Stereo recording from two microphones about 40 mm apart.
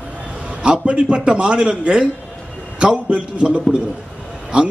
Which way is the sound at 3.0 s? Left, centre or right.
Right.